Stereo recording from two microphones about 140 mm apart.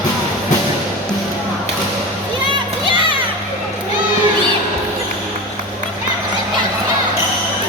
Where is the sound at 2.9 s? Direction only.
35° right (ahead or behind).